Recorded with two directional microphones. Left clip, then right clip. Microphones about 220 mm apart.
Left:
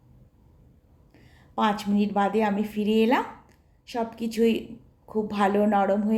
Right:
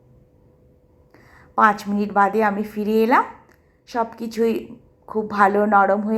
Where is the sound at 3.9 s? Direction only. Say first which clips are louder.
Right 6 dB; centre (ahead or behind).